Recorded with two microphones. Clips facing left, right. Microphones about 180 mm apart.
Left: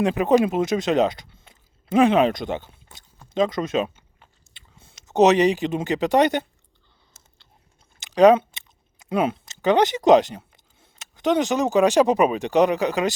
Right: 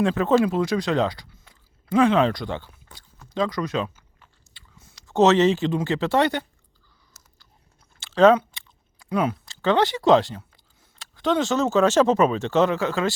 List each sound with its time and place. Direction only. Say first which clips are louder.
0.0 s speech: left 1 dB; 15° left (ahead or behind)
7.9 s speech: left 2 dB; 15° left (ahead or behind)